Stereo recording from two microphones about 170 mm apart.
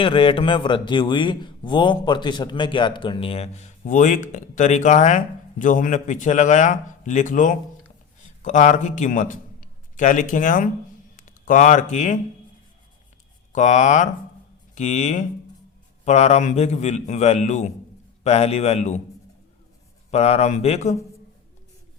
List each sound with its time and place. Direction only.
0.0 s a man's voice: 30° left (ahead or behind); by 12.2 s 45° left (ahead or behind)
13.5 s speech: 45° left (ahead or behind)
20.1 s speech: 40° left (ahead or behind)